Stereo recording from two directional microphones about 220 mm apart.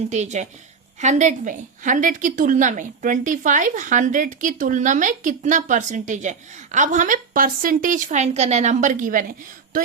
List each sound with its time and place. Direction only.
0.1 s a woman's voice: 30° right (ahead or behind)